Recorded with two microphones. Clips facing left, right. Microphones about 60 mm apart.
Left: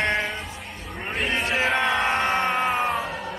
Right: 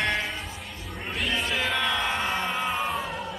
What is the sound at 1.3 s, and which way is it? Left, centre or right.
Crowd, left.